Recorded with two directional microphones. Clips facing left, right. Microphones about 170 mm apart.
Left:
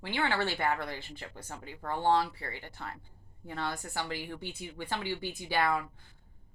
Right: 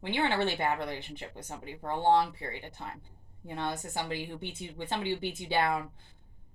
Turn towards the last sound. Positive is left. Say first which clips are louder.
# right 1 dB
turn(degrees=-25)  # may be behind; listen again after turning